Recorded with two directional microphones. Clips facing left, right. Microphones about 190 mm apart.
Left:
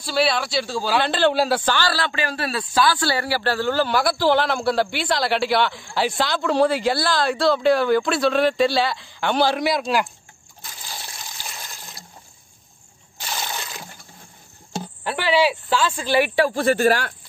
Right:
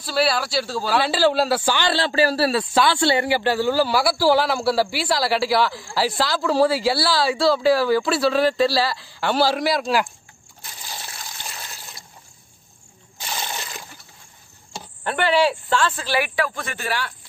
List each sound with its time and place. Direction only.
0.0 s a man's voice: 5° right (ahead or behind)
1.9 s a man's voice: 30° right (ahead or behind); by 10.0 s centre (ahead or behind)
13.3 s water: 5° right (ahead or behind)
15.0 s speech: 5° left (ahead or behind)
16.3 s speech: 35° left (ahead or behind)